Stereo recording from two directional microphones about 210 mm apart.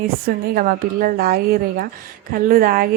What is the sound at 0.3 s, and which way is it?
A woman's voice, 45° right (ahead or behind).